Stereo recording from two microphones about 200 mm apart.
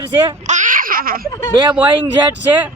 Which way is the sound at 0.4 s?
40° right (ahead or behind).